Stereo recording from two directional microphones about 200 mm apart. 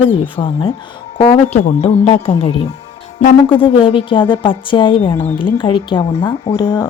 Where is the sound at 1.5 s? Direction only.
35° left (ahead or behind).